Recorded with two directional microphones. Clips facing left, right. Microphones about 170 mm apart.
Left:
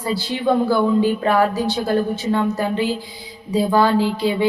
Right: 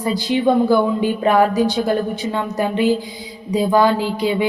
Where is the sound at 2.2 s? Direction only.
35° left (ahead or behind).